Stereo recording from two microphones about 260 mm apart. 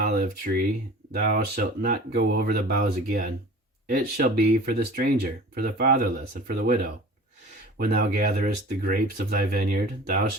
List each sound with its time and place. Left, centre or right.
0.0 s speech: right